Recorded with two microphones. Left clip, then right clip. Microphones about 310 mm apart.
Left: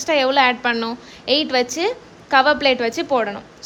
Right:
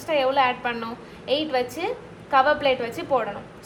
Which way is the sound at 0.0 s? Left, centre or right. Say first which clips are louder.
Left 5 dB; left.